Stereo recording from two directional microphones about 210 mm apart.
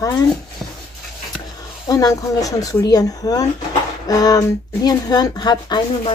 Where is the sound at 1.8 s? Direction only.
15° left (ahead or behind).